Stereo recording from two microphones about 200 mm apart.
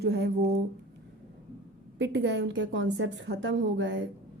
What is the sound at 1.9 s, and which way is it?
A woman's voice, 60° right (ahead or behind).